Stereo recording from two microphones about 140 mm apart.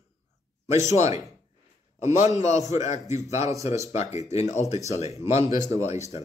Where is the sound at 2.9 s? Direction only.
55° left (ahead or behind).